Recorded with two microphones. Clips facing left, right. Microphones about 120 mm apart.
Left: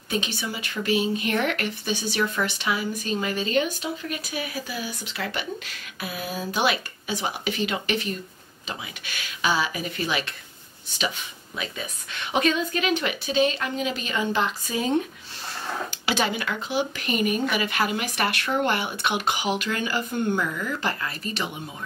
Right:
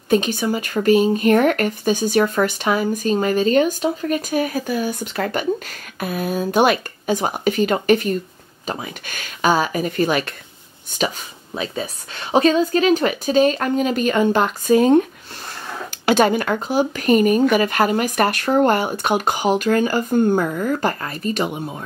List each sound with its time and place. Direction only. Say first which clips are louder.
0.1 s speech: right 11 dB; 45° right (ahead or behind)
11.5 s speech: right 8 dB; 35° right (ahead or behind); by 15.0 s 50° right (ahead or behind)
16.1 s speech: right 10 dB; 50° right (ahead or behind)